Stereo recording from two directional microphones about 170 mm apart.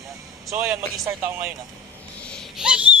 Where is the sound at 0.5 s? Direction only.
15° right (ahead or behind).